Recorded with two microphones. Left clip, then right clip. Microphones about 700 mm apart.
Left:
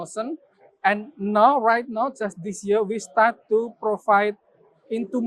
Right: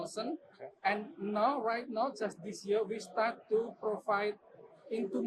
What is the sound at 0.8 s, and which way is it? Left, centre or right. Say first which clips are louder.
Speech: left 12 dB; left.